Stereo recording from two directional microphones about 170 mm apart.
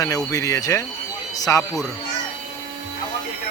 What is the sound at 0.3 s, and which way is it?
Speech, 20° left (ahead or behind).